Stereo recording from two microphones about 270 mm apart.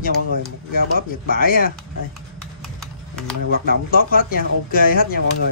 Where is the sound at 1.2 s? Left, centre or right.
Left.